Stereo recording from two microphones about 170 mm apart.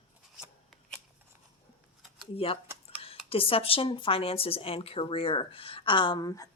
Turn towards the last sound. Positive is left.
turn(degrees=20)  # may be behind; listen again after turning